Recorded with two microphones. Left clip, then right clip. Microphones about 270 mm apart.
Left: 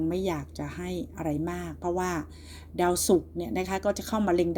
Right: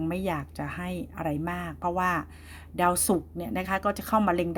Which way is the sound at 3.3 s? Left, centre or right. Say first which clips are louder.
Right 1 dB; right.